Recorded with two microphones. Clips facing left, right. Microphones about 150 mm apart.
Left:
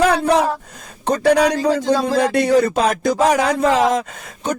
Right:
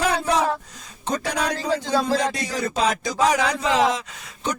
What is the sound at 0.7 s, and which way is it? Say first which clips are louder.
Speech: left 6 dB; 55° left (ahead or behind).